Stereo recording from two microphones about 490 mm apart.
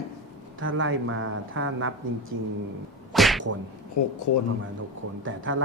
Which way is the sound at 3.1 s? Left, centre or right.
Centre.